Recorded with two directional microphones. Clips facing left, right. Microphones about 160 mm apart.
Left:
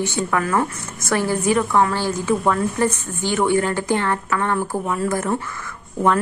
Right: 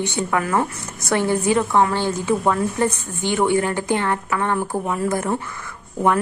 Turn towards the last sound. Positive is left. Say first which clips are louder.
# even
turn(degrees=-15)  # may be behind; listen again after turning